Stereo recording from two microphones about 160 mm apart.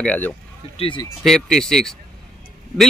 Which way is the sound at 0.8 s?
30° left (ahead or behind).